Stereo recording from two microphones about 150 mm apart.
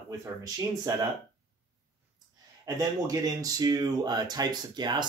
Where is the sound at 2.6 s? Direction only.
25° right (ahead or behind).